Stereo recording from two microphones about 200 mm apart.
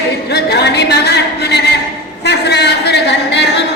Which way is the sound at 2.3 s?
55° left (ahead or behind).